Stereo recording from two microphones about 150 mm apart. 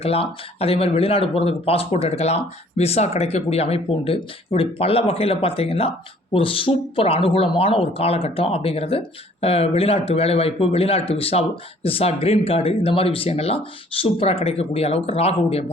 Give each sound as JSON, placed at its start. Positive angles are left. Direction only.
{"t": 0.0, "sound": "speech", "side_deg": 40}